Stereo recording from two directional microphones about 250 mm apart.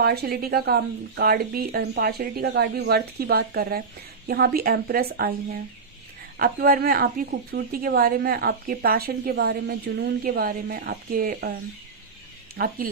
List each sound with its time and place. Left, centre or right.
0.0 s a woman's voice: right
6.4 s a woman's voice: right
12.5 s a woman's voice: right